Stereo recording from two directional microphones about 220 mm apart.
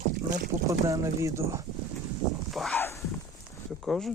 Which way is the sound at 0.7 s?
15° right (ahead or behind).